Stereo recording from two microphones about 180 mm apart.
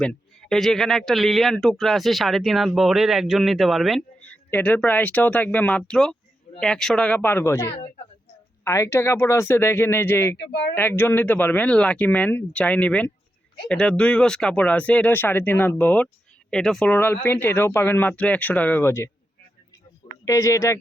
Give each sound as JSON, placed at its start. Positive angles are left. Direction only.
{"t": 0.0, "sound": "a man's voice", "side_deg": 5}
{"t": 10.3, "sound": "speech", "side_deg": 65}
{"t": 10.8, "sound": "a man's voice", "side_deg": 10}
{"t": 20.2, "sound": "speech", "side_deg": 15}